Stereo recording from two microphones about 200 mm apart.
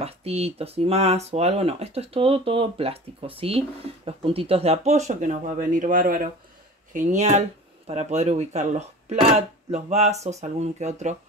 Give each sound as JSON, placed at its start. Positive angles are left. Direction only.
{"t": 0.0, "sound": "speech", "side_deg": -30}